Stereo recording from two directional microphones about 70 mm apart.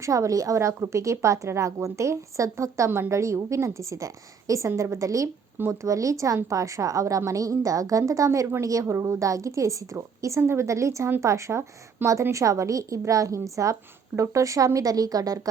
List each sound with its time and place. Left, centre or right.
0.0 s a woman's voice: right